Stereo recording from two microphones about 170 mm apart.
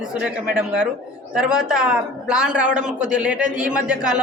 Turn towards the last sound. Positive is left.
turn(degrees=-5)  # may be behind; listen again after turning